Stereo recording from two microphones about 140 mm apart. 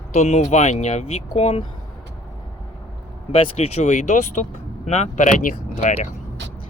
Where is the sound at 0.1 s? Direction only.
55° left (ahead or behind).